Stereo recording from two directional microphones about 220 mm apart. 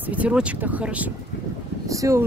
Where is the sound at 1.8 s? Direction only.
15° right (ahead or behind).